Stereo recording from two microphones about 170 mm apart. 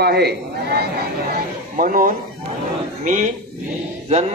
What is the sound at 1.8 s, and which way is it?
Speech, 55° right (ahead or behind).